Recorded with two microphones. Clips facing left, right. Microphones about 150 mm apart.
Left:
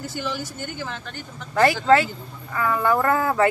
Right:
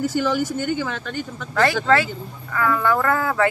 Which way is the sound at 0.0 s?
90° right.